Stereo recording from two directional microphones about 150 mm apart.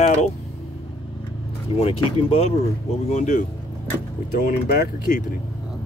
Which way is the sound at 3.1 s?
50° left (ahead or behind).